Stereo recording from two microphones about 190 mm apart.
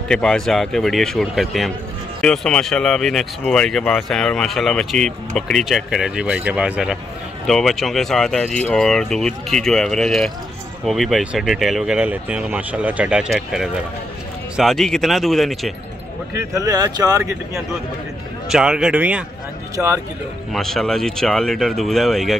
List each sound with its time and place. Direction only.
0.1 s speech: 5° left (ahead or behind)
16.3 s speech: 15° right (ahead or behind)
18.5 s speech: 5° right (ahead or behind)